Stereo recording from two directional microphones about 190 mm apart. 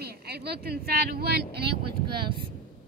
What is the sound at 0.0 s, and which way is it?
Speech, 55° right (ahead or behind).